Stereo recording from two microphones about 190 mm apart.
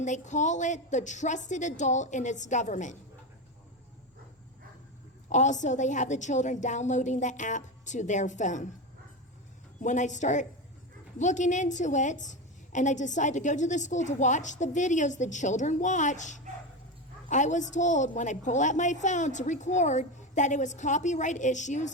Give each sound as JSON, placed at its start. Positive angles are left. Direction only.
{"t": 0.0, "sound": "a woman's voice", "side_deg": 40}
{"t": 5.3, "sound": "a woman's voice", "side_deg": 40}
{"t": 9.8, "sound": "a woman's voice", "side_deg": 40}